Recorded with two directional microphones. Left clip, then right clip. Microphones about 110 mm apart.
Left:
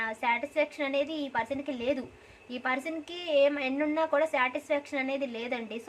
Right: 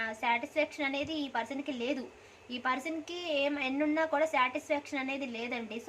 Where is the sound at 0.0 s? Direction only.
30° left (ahead or behind).